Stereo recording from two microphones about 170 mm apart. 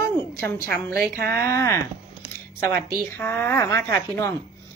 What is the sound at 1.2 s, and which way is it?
Speech, 15° left (ahead or behind).